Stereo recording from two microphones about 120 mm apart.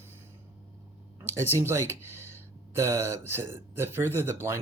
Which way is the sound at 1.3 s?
20° right (ahead or behind).